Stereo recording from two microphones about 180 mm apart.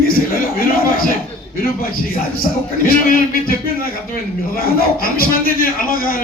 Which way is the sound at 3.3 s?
55° left (ahead or behind).